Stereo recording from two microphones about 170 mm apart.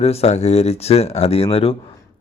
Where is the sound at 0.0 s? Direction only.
35° left (ahead or behind).